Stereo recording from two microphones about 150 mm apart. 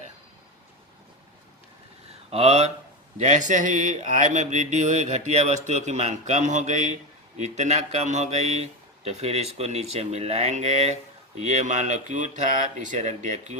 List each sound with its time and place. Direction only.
2.3 s speech: 45° right (ahead or behind)